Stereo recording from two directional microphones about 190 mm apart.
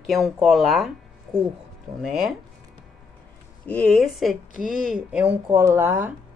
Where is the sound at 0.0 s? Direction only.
Centre (ahead or behind).